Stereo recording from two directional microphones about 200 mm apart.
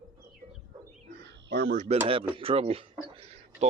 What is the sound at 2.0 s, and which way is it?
Speech, 25° right (ahead or behind).